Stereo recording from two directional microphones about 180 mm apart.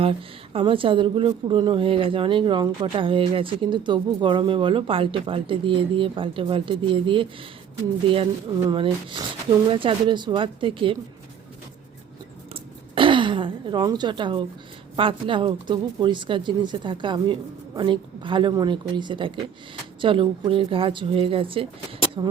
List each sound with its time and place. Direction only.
0.0 s speech: 30° right (ahead or behind)
12.5 s a sound: 30° right (ahead or behind)
14.9 s speech: 30° right (ahead or behind)